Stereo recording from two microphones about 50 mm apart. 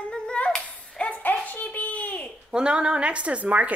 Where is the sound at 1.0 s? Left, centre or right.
Left.